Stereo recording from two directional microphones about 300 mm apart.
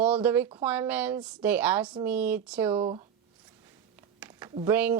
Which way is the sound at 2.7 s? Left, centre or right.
Centre.